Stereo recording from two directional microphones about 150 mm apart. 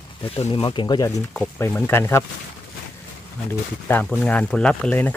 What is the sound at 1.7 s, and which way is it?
Speech, 15° left (ahead or behind).